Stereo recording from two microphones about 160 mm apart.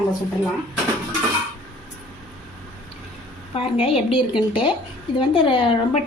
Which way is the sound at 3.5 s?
35° left (ahead or behind).